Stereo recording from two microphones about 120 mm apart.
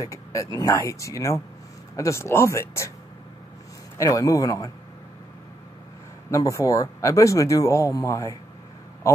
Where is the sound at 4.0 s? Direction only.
25° left (ahead or behind).